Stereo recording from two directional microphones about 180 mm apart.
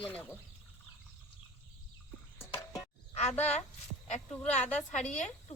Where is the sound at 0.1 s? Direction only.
10° left (ahead or behind).